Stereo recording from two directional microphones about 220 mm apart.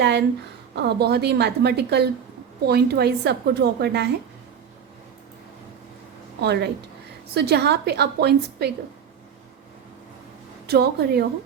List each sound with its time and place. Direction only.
0.0 s a woman's voice: 50° right (ahead or behind)
6.4 s a woman's voice: 50° right (ahead or behind)
10.7 s a woman's voice: 45° right (ahead or behind)